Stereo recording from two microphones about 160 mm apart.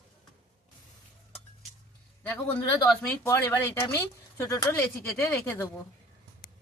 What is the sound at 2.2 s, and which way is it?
Speech, 10° left (ahead or behind).